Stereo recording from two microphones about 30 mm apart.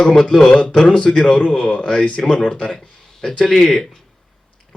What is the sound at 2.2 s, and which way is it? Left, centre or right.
Speech, left.